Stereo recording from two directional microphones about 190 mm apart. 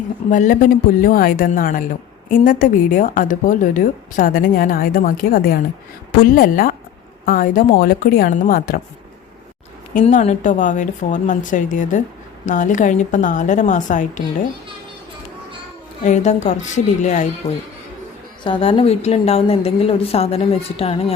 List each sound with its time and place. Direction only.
0.3 s a woman's voice: 45° left (ahead or behind)
9.9 s a woman's voice: 40° left (ahead or behind)
16.0 s a woman's voice: 40° left (ahead or behind)
18.4 s a woman's voice: 25° left (ahead or behind)